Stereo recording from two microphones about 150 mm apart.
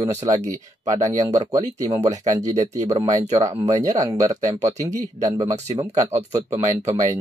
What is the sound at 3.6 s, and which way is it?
Speech, 20° right (ahead or behind).